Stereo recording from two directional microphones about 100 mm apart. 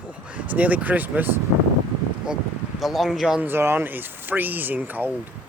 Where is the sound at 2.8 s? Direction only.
5° right (ahead or behind).